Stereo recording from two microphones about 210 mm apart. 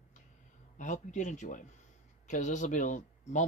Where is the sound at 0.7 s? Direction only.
35° left (ahead or behind).